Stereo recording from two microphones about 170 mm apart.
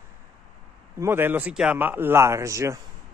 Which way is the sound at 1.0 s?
15° right (ahead or behind).